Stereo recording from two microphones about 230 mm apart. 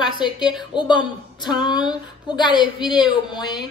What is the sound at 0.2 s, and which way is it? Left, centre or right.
A woman's voice, centre.